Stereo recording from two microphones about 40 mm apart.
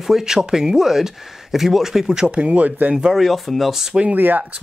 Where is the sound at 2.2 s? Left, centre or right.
Right.